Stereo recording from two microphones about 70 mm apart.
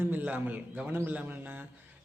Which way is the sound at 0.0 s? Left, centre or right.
Right.